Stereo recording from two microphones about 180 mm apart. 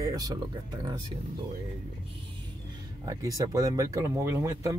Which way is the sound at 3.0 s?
20° right (ahead or behind).